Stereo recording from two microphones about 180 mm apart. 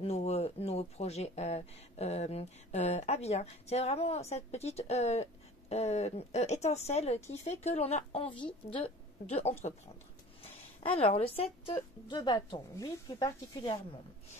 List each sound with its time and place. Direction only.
0.0 s speech: 35° left (ahead or behind)
10.8 s a woman's voice: 30° left (ahead or behind)